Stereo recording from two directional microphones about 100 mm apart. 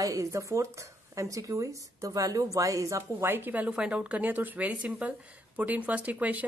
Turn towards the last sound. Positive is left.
turn(degrees=-15)  # may be behind; listen again after turning